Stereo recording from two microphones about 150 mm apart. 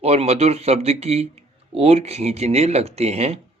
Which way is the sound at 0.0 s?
45° right (ahead or behind).